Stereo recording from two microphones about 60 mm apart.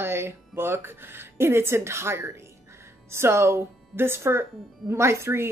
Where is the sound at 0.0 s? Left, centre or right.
Right.